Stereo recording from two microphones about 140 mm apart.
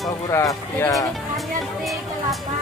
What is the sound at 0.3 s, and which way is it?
Speech, 20° left (ahead or behind).